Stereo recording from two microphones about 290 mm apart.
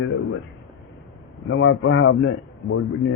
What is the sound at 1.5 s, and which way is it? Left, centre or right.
A man's voice, left.